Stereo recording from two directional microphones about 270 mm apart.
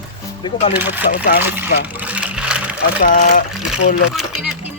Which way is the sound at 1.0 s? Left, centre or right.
Left.